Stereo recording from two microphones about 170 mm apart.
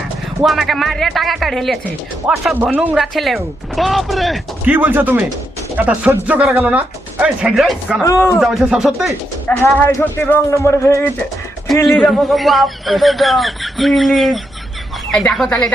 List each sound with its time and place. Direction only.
0.4 s speech: centre (ahead or behind)
4.7 s speech: 10° right (ahead or behind)
8.0 s speech: 15° left (ahead or behind)
8.4 s speech: centre (ahead or behind)
9.6 s speech: 10° left (ahead or behind)
11.9 s speech: centre (ahead or behind)